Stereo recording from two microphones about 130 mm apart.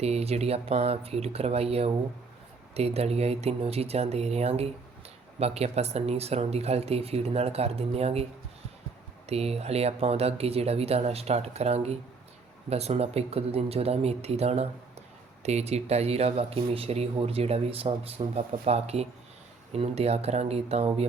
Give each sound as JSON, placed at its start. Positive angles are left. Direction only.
{"t": 0.0, "sound": "speech", "side_deg": -55}